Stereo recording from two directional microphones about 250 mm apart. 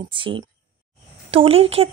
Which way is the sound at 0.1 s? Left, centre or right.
Centre.